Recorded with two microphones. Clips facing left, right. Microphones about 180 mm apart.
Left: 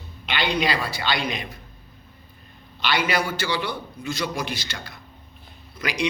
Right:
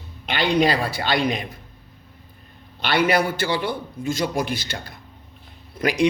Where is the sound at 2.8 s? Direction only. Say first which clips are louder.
Right 4 dB; 55° right (ahead or behind).